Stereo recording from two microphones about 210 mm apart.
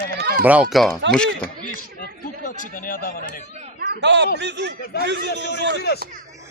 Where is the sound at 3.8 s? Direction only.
55° right (ahead or behind).